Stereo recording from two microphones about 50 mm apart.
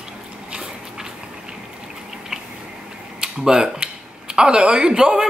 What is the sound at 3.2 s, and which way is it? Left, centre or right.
Speech, centre.